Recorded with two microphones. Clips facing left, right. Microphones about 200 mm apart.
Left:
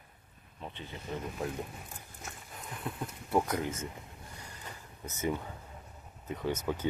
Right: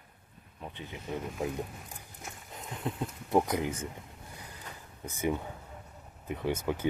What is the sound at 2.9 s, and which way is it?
Speech, 20° right (ahead or behind).